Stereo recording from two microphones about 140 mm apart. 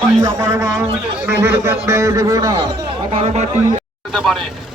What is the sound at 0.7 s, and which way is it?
A man's voice, 15° right (ahead or behind).